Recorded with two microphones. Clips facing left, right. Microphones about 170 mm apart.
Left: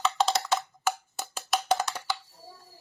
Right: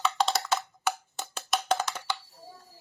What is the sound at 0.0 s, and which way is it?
Wood block, centre (ahead or behind).